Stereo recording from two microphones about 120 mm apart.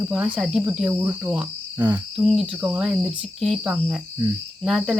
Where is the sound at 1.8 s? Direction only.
30° right (ahead or behind).